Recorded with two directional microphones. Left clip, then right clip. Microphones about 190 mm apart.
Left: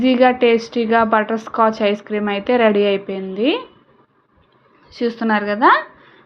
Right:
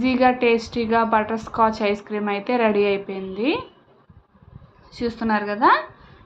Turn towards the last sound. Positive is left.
turn(degrees=20)  # may be behind; listen again after turning